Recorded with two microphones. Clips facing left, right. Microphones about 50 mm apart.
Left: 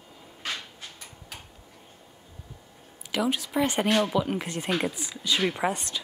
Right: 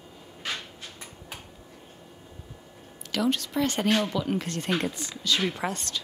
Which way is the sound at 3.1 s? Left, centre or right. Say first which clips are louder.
Even; centre.